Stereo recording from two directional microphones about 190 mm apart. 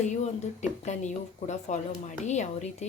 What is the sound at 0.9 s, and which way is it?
A woman's voice, 40° left (ahead or behind).